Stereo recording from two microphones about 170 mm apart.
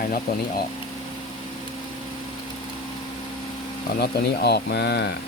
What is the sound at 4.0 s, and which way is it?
Speech, 70° left (ahead or behind).